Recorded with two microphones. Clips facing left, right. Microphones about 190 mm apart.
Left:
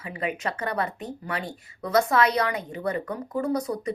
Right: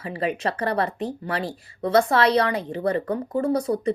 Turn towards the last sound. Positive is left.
turn(degrees=-30)  # may be behind; listen again after turning